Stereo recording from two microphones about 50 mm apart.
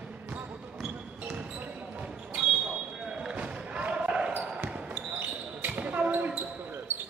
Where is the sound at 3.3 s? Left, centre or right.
Right.